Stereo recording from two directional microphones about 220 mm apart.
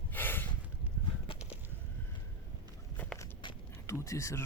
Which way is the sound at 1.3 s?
25° left (ahead or behind).